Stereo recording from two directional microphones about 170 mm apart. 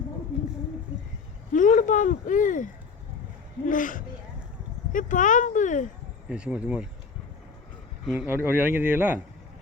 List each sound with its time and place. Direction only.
1.5 s speech: 45° left (ahead or behind)
3.7 s speech: 50° left (ahead or behind)
6.2 s a man's voice: 5° right (ahead or behind)
8.0 s a man's voice: 5° right (ahead or behind)